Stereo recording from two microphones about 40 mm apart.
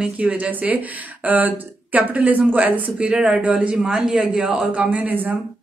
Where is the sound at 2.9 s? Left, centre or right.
Right.